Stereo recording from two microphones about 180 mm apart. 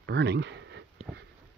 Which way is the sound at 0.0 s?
70° right (ahead or behind).